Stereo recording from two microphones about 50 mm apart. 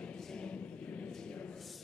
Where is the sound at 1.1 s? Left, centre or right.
Centre.